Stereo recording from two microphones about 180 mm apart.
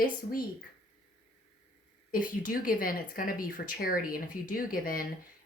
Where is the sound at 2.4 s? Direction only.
50° left (ahead or behind).